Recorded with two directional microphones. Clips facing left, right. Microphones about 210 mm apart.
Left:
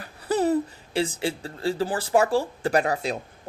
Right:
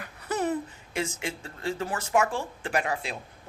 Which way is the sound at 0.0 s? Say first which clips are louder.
Left 6 dB; 35° left (ahead or behind).